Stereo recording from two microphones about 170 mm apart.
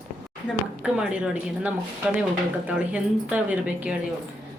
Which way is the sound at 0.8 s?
5° right (ahead or behind).